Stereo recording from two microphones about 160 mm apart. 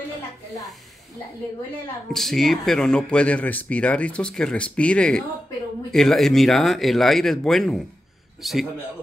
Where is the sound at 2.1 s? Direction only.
Centre (ahead or behind).